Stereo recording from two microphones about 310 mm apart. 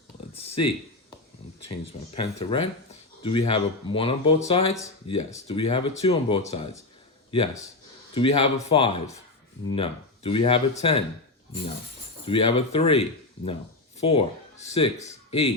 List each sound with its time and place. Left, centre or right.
1.8 s speech: centre
12.2 s speech: centre